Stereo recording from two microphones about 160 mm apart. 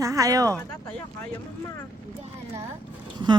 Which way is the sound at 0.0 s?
20° right (ahead or behind).